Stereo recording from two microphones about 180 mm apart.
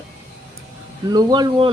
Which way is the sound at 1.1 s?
20° right (ahead or behind).